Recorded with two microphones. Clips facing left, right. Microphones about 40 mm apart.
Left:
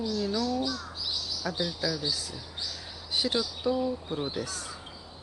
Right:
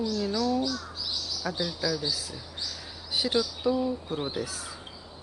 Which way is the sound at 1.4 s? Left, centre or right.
Centre.